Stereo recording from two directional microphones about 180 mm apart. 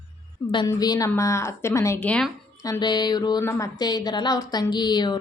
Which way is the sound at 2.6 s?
25° left (ahead or behind).